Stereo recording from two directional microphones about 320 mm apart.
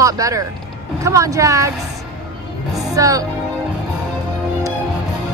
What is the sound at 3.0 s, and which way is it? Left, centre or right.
Speech, centre.